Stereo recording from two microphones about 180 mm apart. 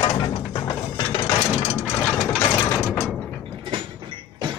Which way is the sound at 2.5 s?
20° left (ahead or behind).